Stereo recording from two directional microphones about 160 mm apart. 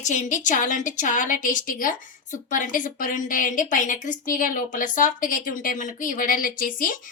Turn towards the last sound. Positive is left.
turn(degrees=60)  # may be behind; listen again after turning